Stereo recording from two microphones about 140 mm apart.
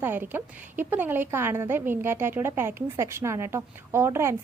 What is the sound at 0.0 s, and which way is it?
A woman's voice, 15° right (ahead or behind).